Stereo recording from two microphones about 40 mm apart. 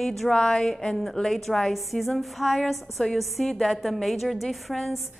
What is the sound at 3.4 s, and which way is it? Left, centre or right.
Speech, centre.